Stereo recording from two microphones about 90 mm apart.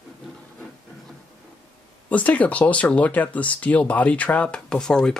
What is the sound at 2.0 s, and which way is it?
Speech, 15° left (ahead or behind).